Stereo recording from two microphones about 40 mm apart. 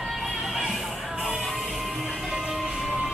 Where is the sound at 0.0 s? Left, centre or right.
Centre.